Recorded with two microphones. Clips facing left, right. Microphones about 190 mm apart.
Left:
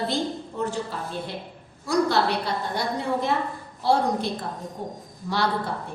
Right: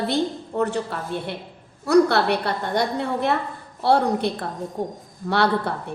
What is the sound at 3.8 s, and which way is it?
Speech, 60° right (ahead or behind).